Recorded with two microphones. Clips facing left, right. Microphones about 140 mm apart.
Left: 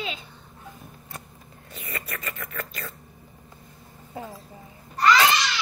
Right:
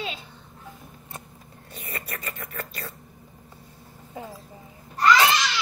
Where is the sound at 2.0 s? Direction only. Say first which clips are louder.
Left 1 dB; 30° right (ahead or behind).